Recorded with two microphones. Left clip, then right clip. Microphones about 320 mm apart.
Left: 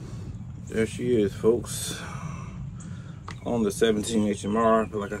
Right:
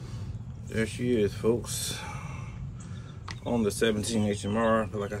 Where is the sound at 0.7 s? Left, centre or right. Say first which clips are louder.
Left 4 dB; centre.